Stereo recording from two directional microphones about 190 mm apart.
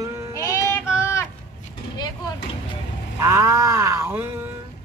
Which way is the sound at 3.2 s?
15° right (ahead or behind).